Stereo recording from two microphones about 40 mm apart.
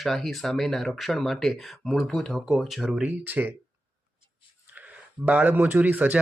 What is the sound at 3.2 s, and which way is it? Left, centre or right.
Speech, right.